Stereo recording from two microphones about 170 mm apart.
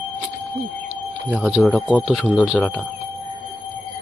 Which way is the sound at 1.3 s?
5° right (ahead or behind).